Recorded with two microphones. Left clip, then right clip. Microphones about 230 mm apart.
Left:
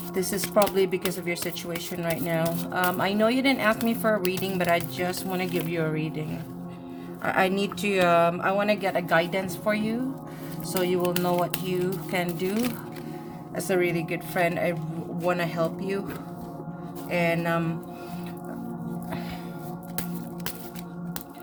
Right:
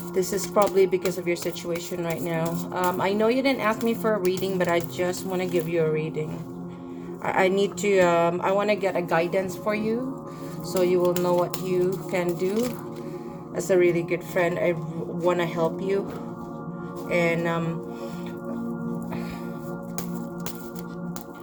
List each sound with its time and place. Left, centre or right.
0.1 s speech: centre
7.3 s speech: centre
17.1 s speech: centre